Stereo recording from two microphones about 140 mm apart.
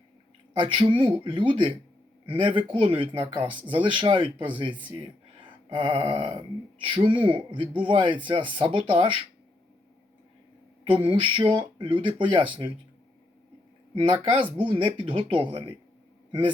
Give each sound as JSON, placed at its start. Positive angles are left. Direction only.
{"t": 0.5, "sound": "speech", "side_deg": -35}
{"t": 10.8, "sound": "speech", "side_deg": -35}
{"t": 13.9, "sound": "speech", "side_deg": -35}